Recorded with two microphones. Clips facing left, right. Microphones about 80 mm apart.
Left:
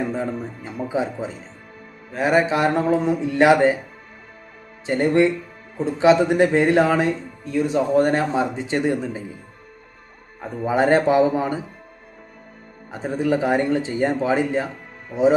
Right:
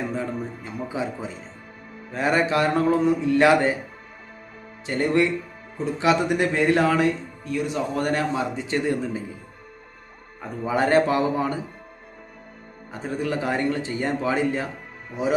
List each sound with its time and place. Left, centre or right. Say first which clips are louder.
0.9 s speech: left 5 dB; left
4.9 s speech: left 4 dB; left
10.7 s speech: left 3 dB; left
12.9 s speech: left 5 dB; left